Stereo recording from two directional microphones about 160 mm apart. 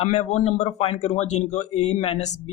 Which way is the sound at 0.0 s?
45° left (ahead or behind).